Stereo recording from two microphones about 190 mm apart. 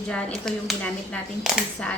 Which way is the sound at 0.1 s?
5° left (ahead or behind).